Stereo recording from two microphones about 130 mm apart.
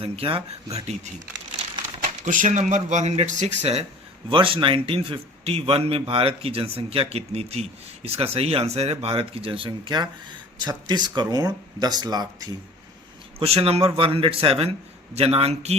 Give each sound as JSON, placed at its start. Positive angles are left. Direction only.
{"t": 0.0, "sound": "a man's voice", "side_deg": -45}
{"t": 2.2, "sound": "speech", "side_deg": -80}
{"t": 4.3, "sound": "a man's voice", "side_deg": -40}
{"t": 13.4, "sound": "a man's voice", "side_deg": -50}